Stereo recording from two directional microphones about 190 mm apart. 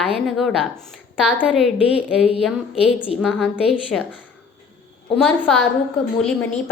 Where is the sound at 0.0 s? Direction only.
Centre (ahead or behind).